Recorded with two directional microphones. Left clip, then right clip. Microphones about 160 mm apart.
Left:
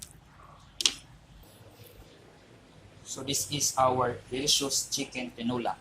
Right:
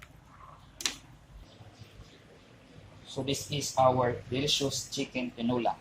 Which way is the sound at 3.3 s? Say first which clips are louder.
Left 2 dB; 50° right (ahead or behind).